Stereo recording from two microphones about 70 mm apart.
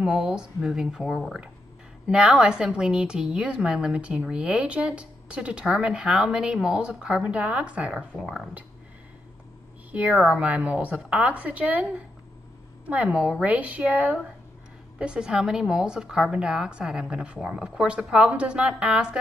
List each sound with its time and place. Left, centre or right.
0.0 s a woman's voice: centre
2.0 s a woman's voice: centre
10.0 s a woman's voice: centre